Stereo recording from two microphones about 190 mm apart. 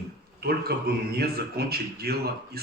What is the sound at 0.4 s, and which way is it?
Speech, 55° right (ahead or behind).